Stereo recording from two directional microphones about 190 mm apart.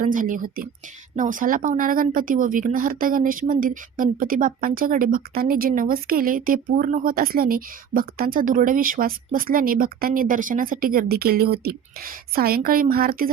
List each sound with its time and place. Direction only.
0.0 s speech: 45° right (ahead or behind)